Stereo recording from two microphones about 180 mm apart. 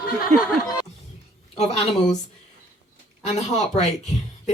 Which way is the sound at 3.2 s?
40° left (ahead or behind).